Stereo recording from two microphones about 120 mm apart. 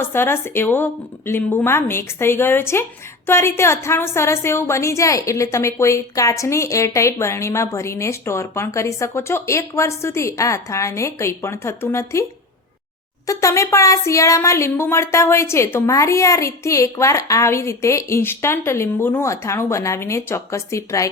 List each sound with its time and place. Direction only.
0.0 s a woman's voice: 20° left (ahead or behind)
13.2 s a woman's voice: 25° left (ahead or behind)